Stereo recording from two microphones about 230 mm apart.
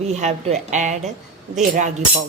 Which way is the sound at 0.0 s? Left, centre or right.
Right.